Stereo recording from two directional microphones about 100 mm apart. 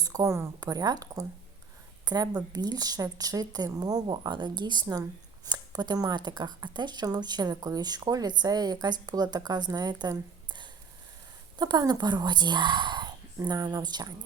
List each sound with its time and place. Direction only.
0.0 s a woman's voice: 35° right (ahead or behind)
0.6 s a woman's voice: 40° right (ahead or behind)